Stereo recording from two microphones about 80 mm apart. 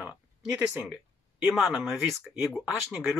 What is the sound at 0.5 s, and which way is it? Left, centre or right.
Speech, centre.